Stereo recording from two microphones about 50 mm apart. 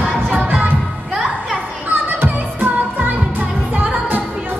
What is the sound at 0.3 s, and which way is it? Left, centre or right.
Music, right.